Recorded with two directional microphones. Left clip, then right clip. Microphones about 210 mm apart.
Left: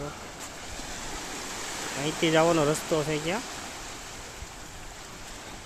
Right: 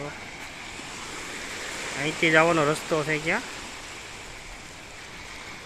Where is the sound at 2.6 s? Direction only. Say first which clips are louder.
Right 2 dB; 10° right (ahead or behind).